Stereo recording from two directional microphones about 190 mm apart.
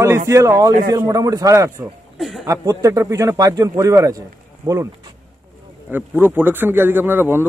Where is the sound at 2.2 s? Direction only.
Centre (ahead or behind).